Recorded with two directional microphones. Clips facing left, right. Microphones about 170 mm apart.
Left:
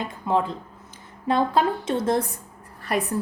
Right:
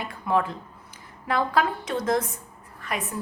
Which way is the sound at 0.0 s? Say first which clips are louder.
Left 1 dB; 20° left (ahead or behind).